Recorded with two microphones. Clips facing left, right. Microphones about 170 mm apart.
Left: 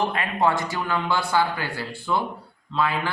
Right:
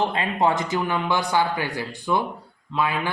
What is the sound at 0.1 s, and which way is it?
Speech, 25° right (ahead or behind).